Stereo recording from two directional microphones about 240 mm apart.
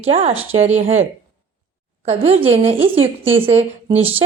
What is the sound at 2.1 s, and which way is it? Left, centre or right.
A woman's voice, right.